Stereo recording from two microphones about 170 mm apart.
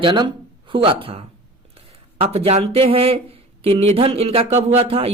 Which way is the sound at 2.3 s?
35° right (ahead or behind).